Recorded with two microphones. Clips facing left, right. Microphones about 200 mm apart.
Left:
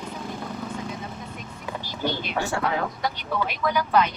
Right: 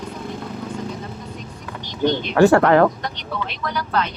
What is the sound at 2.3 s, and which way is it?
Speech, 90° right.